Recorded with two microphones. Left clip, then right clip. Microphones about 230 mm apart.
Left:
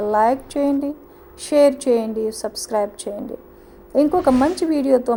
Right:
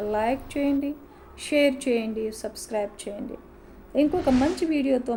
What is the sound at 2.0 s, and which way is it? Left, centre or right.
Speech, left.